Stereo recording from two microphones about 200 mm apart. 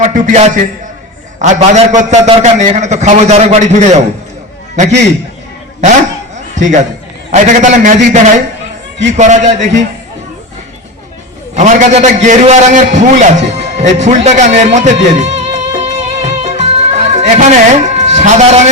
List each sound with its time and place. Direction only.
0.0 s a man's voice: 35° right (ahead or behind)
6.3 s a sound: 35° right (ahead or behind)
7.3 s a man's voice: 35° right (ahead or behind)
11.5 s a man's voice: 35° right (ahead or behind)
14.3 s music: 35° right (ahead or behind)